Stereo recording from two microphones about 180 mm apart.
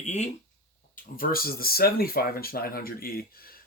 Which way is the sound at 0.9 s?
55° left (ahead or behind).